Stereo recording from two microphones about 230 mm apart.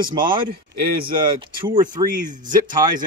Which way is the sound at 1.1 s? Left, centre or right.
Right.